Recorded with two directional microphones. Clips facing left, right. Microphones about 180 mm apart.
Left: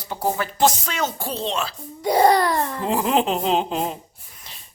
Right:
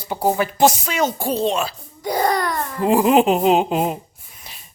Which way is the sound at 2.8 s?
10° right (ahead or behind).